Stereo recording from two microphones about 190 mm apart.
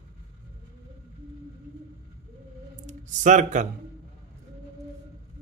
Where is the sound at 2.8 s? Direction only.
40° right (ahead or behind).